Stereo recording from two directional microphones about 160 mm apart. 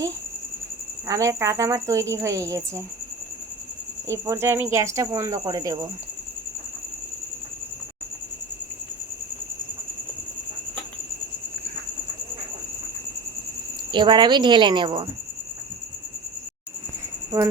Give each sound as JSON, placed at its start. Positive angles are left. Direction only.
{"t": 1.0, "sound": "speech", "side_deg": -20}
{"t": 4.1, "sound": "speech", "side_deg": -15}
{"t": 13.9, "sound": "speech", "side_deg": -30}
{"t": 17.3, "sound": "speech", "side_deg": -20}